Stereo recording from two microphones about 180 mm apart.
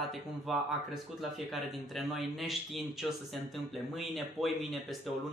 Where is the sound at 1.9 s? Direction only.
Centre (ahead or behind).